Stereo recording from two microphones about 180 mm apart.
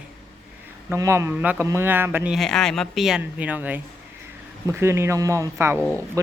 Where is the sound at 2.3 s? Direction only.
Centre (ahead or behind).